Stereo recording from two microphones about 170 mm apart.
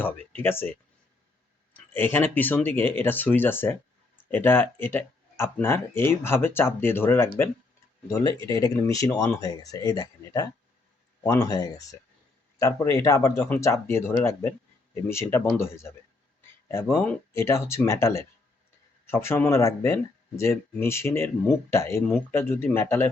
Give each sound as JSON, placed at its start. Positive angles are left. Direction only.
{"t": 0.0, "sound": "speech", "side_deg": 10}
{"t": 15.0, "sound": "speech", "side_deg": 15}